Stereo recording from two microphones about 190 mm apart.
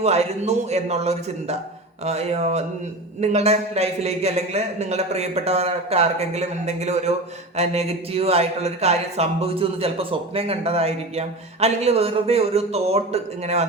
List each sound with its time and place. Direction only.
0.0 s speech: 35° right (ahead or behind)